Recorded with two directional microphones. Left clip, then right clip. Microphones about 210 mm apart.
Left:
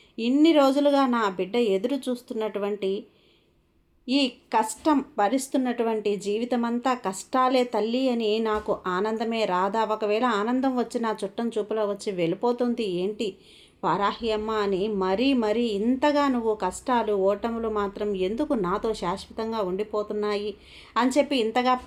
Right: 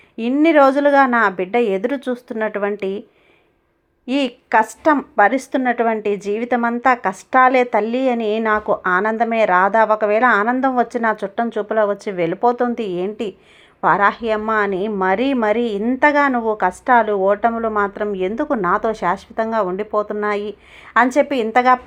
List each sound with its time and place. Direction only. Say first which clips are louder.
0.2 s a woman's voice: right 7 dB; 15° right (ahead or behind)
4.0 s a woman's voice: right 5 dB; 15° right (ahead or behind)